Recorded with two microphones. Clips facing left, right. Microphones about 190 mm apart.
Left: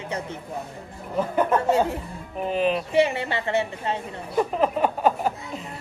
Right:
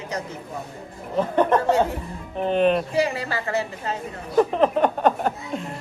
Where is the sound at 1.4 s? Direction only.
5° left (ahead or behind).